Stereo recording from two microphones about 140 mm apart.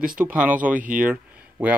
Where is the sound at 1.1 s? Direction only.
10° right (ahead or behind).